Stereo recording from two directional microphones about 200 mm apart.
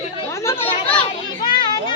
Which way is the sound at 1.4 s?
25° left (ahead or behind).